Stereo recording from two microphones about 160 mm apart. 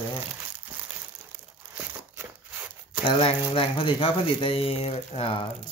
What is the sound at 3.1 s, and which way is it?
Speech, 35° left (ahead or behind).